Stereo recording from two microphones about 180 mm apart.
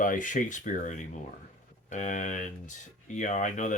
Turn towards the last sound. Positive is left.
turn(degrees=45)  # may be behind; listen again after turning